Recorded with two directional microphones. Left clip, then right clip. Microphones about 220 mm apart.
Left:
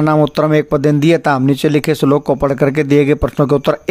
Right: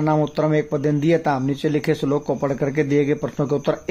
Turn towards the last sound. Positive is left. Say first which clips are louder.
# left 8 dB
turn(degrees=45)  # may be behind; listen again after turning